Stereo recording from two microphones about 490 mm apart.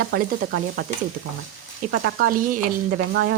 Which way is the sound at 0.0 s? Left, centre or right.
Centre.